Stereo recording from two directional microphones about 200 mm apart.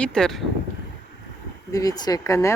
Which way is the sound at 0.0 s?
5° left (ahead or behind).